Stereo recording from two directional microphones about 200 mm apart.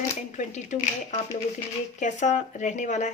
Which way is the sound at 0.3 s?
35° left (ahead or behind).